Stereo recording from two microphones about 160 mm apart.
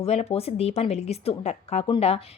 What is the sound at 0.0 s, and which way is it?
A woman's voice, 40° left (ahead or behind).